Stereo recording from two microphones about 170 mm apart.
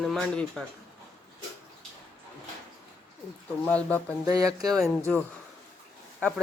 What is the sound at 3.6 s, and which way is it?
Speech, 10° left (ahead or behind).